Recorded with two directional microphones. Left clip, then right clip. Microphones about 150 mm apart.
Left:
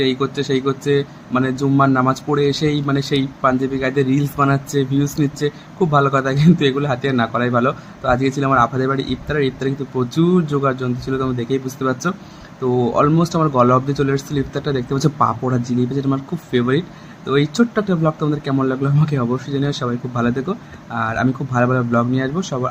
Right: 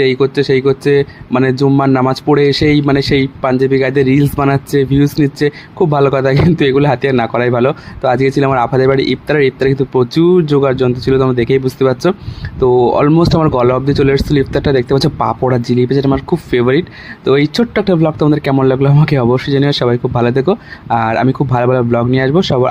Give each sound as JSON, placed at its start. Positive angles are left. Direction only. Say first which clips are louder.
{"t": 0.0, "sound": "speech", "louder": "right 8 dB", "side_deg": -40}